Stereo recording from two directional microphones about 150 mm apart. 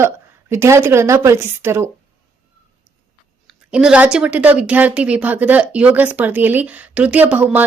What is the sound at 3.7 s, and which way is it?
A woman's voice, 5° right (ahead or behind).